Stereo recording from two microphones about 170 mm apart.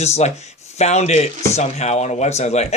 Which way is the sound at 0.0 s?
40° left (ahead or behind).